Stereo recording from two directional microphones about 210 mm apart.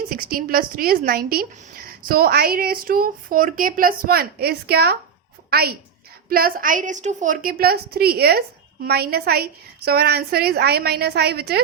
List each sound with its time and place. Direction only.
0.1 s a woman's voice: 45° right (ahead or behind)